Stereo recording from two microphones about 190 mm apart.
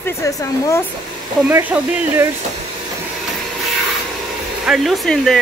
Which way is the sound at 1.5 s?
10° right (ahead or behind).